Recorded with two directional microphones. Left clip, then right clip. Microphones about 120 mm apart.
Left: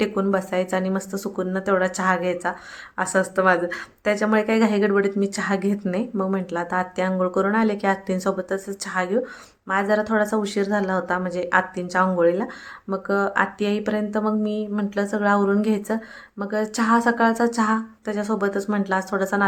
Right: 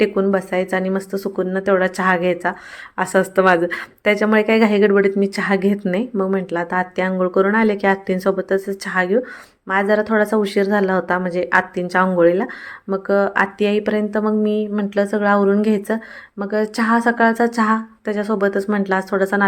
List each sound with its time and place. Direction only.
0.0 s a woman's voice: 20° right (ahead or behind)